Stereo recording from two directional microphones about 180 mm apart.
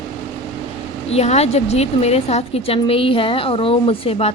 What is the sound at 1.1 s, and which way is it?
A woman's voice, 35° left (ahead or behind).